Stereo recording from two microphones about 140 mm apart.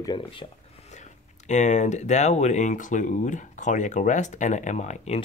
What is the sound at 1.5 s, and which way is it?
Speech, 55° left (ahead or behind).